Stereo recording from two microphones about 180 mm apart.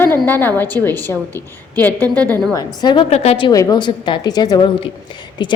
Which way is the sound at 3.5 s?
20° left (ahead or behind).